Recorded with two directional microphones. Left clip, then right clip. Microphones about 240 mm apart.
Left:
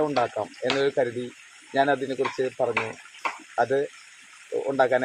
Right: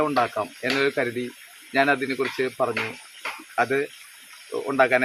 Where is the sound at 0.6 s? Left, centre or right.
Centre.